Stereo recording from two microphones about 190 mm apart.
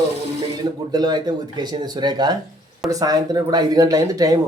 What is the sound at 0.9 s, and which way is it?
Speech, 20° right (ahead or behind).